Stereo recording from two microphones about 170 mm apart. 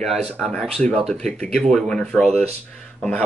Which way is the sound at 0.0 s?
Centre (ahead or behind).